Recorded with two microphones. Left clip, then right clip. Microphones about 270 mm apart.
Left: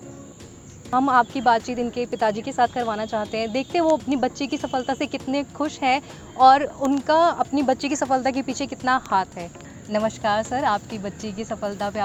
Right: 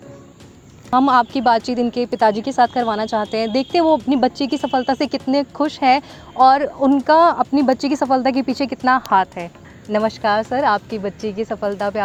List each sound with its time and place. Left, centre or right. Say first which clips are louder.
0.9 s speech: right 4 dB; right